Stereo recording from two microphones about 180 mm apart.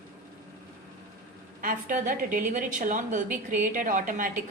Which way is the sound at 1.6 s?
45° right (ahead or behind).